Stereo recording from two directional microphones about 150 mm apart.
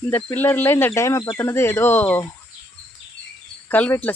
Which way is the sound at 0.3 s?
15° left (ahead or behind).